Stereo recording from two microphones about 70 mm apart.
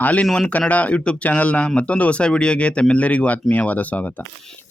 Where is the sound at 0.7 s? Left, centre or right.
Left.